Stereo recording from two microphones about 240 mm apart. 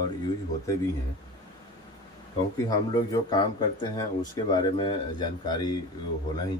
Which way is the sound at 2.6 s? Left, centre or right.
Centre.